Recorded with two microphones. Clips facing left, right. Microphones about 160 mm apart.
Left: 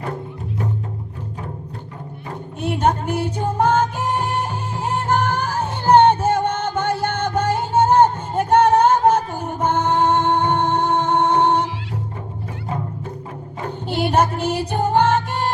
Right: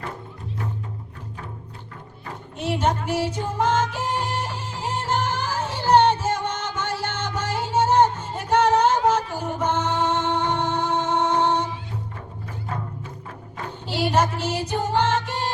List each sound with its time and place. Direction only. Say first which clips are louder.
2.6 s music: left 4 dB; 55° left (ahead or behind)
13.7 s music: left 4 dB; 50° left (ahead or behind)